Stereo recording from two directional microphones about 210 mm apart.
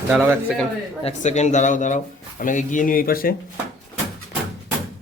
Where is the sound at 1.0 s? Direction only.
30° left (ahead or behind).